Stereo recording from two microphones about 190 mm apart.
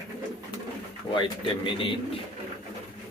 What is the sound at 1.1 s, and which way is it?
Speech, 25° left (ahead or behind).